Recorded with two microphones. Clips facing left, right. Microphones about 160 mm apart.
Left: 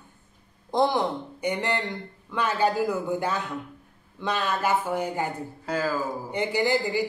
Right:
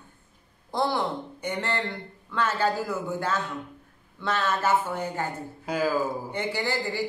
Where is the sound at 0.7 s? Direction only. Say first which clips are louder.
Left 3 dB; 20° left (ahead or behind).